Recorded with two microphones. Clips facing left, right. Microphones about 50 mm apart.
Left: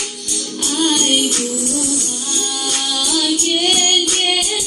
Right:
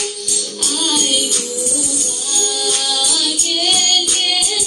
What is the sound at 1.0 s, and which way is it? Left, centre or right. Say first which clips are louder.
Music: left 3 dB; left.